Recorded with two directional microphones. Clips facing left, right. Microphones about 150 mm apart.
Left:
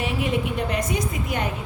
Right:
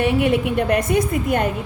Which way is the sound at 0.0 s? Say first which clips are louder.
Right 7 dB; 65° right (ahead or behind).